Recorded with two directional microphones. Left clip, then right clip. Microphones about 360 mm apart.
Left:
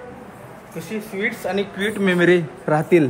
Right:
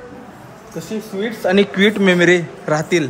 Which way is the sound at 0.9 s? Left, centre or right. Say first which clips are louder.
Right 1 dB; centre.